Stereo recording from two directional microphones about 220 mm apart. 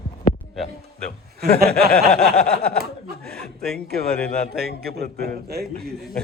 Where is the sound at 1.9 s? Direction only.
5° left (ahead or behind).